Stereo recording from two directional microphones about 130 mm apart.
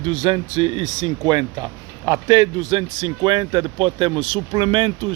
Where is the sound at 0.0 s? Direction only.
35° right (ahead or behind).